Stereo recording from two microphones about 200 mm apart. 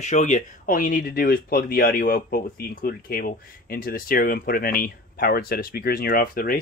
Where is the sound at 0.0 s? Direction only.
35° left (ahead or behind).